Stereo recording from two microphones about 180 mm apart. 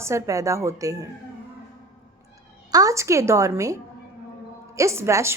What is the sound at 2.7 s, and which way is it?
A woman's voice, 20° right (ahead or behind).